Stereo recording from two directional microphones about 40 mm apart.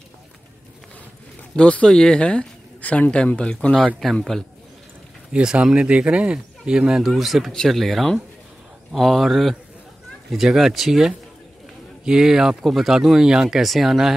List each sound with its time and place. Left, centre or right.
1.6 s speech: left
2.8 s speech: left
4.0 s a man's voice: centre
5.3 s speech: centre
5.6 s speech: right
7.0 s speech: centre
12.6 s speech: centre